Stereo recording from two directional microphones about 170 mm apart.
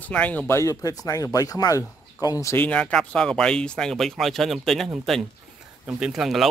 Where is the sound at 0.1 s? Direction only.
10° left (ahead or behind).